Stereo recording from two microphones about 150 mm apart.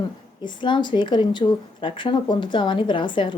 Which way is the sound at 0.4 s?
30° left (ahead or behind).